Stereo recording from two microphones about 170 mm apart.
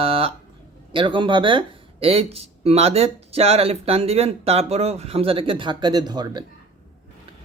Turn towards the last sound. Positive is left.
turn(degrees=-25)  # may be behind; listen again after turning